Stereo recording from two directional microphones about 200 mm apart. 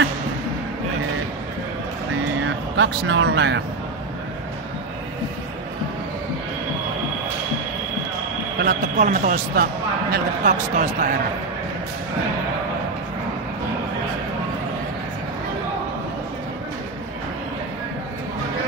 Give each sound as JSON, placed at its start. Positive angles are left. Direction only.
{"t": 2.4, "sound": "speech", "side_deg": -65}
{"t": 8.6, "sound": "a man's voice", "side_deg": -40}